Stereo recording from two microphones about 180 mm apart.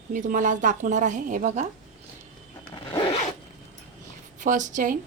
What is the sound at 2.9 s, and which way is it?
Zipper, 30° left (ahead or behind).